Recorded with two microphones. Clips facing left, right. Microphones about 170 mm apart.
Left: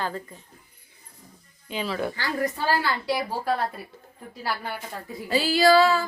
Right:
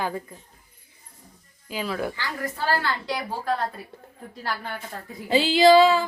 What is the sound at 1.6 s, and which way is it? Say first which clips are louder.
Speech: even; 5° right (ahead or behind).